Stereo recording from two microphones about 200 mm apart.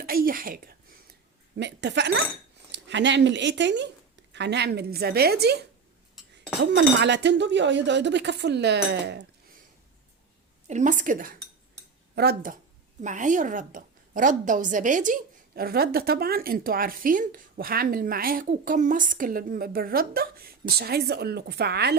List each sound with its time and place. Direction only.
0.0 s a woman's voice: 45° right (ahead or behind)
1.5 s a woman's voice: 60° right (ahead or behind)
6.6 s speech: 65° right (ahead or behind)
10.7 s a woman's voice: 35° right (ahead or behind); by 21.9 s 55° right (ahead or behind)